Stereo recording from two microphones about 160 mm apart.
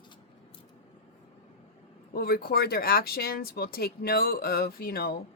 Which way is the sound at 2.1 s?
75° left (ahead or behind).